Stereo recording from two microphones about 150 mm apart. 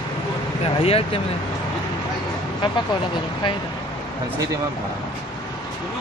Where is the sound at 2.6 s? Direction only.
35° left (ahead or behind).